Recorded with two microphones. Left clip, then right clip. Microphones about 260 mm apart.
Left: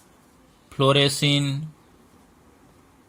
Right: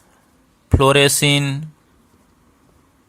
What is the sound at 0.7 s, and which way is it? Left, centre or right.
Speech, right.